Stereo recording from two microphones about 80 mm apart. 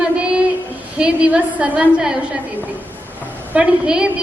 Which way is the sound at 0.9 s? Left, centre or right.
Centre.